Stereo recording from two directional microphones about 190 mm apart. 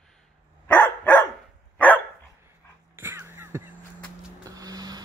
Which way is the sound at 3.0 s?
10° right (ahead or behind).